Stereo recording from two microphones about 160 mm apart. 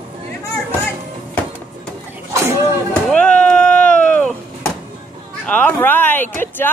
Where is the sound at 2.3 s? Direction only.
20° right (ahead or behind).